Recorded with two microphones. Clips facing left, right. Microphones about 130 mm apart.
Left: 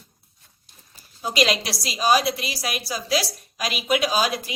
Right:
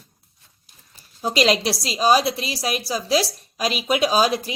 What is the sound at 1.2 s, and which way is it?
A woman's voice, 35° right (ahead or behind).